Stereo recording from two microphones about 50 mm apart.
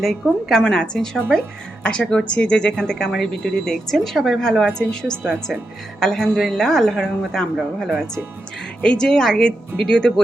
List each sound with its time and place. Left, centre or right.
0.0 s speech: centre
0.6 s speech: centre
8.8 s speech: centre